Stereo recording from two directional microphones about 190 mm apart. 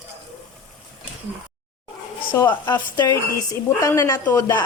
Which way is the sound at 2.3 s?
15° left (ahead or behind).